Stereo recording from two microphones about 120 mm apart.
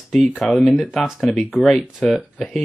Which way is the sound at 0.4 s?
5° left (ahead or behind).